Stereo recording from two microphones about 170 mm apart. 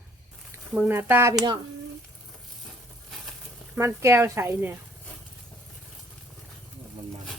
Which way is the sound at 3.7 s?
15° right (ahead or behind).